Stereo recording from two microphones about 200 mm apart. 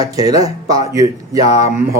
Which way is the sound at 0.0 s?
20° right (ahead or behind).